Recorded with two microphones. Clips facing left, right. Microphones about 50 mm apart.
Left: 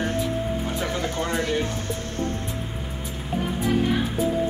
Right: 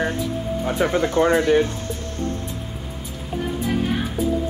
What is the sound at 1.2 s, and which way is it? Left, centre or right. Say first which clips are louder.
Speech: right 10 dB; right.